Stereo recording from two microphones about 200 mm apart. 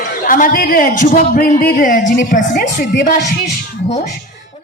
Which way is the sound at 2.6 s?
55° left (ahead or behind).